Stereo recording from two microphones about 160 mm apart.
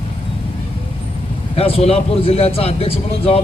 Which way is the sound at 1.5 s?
40° left (ahead or behind).